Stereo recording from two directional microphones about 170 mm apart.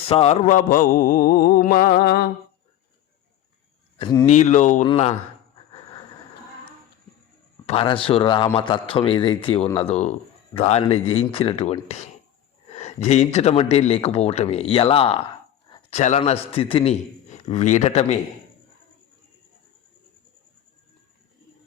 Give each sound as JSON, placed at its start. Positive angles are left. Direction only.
{"t": 0.1, "sound": "mantra", "side_deg": 35}
{"t": 3.9, "sound": "speech", "side_deg": 25}
{"t": 4.3, "sound": "speech", "side_deg": 40}
{"t": 4.9, "sound": "a man's voice", "side_deg": 35}
{"t": 7.7, "sound": "a man's voice", "side_deg": 30}
{"t": 9.6, "sound": "speech", "side_deg": 10}
{"t": 9.9, "sound": "a man's voice", "side_deg": 40}